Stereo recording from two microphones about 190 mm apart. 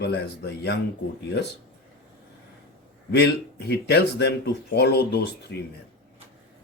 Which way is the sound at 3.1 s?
60° left (ahead or behind).